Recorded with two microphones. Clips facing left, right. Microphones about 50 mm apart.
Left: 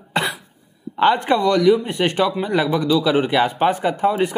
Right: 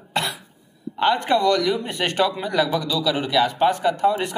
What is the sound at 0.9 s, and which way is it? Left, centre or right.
Speech, left.